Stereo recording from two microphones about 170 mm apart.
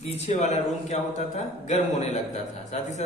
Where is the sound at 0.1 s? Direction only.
45° left (ahead or behind).